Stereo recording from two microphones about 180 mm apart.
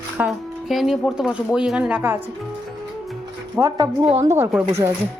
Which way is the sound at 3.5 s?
15° right (ahead or behind).